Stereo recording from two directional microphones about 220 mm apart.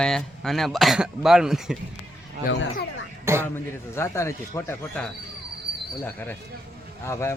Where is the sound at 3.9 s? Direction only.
10° left (ahead or behind).